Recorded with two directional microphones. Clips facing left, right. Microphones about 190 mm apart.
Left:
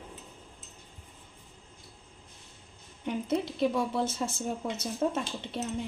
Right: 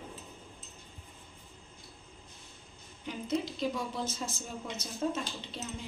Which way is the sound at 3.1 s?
60° left (ahead or behind).